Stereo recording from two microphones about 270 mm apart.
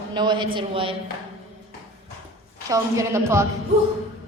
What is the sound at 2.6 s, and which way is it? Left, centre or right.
Speech, centre.